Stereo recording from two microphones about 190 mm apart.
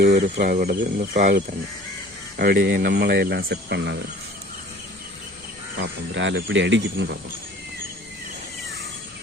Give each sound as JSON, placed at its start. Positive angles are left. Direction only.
{"t": 0.0, "sound": "speech", "side_deg": -55}
{"t": 5.7, "sound": "speech", "side_deg": -75}